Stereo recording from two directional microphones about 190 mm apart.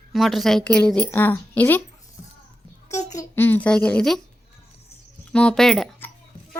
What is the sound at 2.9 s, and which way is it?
A woman's voice, 15° left (ahead or behind).